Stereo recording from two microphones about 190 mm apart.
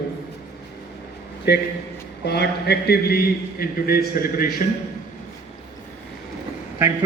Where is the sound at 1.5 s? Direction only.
60° left (ahead or behind).